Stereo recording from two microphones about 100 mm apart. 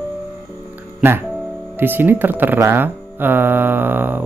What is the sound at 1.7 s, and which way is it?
Speech, 20° right (ahead or behind).